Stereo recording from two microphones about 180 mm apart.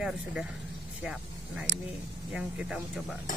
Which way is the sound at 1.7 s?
90° right.